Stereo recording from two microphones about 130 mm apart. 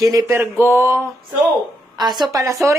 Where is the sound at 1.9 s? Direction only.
35° right (ahead or behind).